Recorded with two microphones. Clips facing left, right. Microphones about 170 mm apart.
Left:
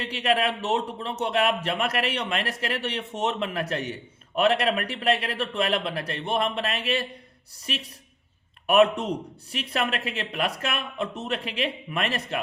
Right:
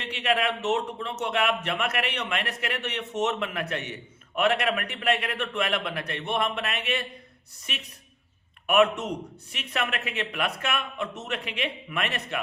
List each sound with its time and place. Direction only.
0.0 s a man's voice: 35° left (ahead or behind)